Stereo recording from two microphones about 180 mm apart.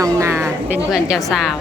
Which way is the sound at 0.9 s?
Centre (ahead or behind).